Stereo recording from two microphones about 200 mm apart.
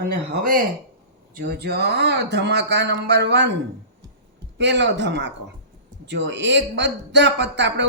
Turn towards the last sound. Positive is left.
turn(degrees=-60)  # may be behind; listen again after turning